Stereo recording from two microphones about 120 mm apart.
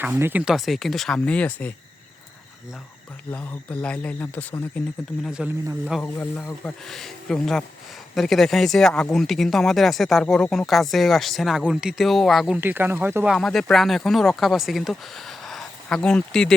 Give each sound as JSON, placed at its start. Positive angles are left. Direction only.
{"t": 0.0, "sound": "speech", "side_deg": -15}
{"t": 0.4, "sound": "speech", "side_deg": 0}
{"t": 3.3, "sound": "speech", "side_deg": 10}
{"t": 5.2, "sound": "speech", "side_deg": -5}
{"t": 6.0, "sound": "speech", "side_deg": 20}
{"t": 6.7, "sound": "speech", "side_deg": 5}
{"t": 12.5, "sound": "speech", "side_deg": -15}
{"t": 13.2, "sound": "speech", "side_deg": 0}